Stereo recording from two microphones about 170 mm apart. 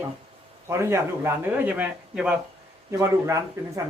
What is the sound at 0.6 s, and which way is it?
A man's voice, 15° right (ahead or behind).